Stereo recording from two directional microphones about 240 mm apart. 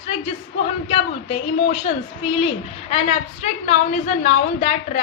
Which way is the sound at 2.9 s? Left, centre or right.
Left.